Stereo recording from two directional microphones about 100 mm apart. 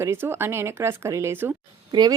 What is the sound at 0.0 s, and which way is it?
Speech, 25° right (ahead or behind).